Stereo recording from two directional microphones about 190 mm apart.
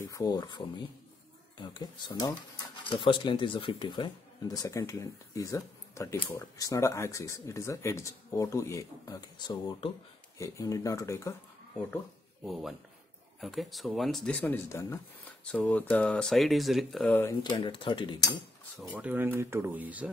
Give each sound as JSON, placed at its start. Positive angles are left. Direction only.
{"t": 0.0, "sound": "speech", "side_deg": 20}
{"t": 12.4, "sound": "speech", "side_deg": 0}
{"t": 17.1, "sound": "speech", "side_deg": 15}
{"t": 18.8, "sound": "speech", "side_deg": -5}